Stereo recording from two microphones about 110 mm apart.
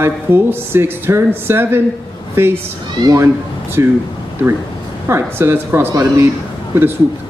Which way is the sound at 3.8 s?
30° right (ahead or behind).